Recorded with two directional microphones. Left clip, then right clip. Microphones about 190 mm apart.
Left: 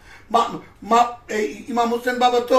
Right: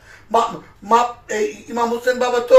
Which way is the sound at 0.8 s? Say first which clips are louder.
Right 1 dB; 10° left (ahead or behind).